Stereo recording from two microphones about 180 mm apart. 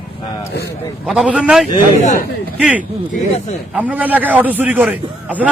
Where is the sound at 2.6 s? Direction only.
5° right (ahead or behind).